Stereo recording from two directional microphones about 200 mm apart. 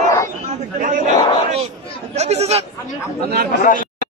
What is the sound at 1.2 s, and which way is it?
Speech, 25° left (ahead or behind).